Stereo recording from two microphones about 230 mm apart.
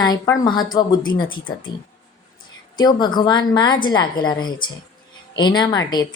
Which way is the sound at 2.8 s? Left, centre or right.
Centre.